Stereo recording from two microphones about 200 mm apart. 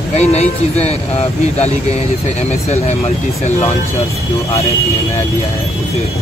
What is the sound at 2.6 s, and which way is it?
Speech, 35° left (ahead or behind).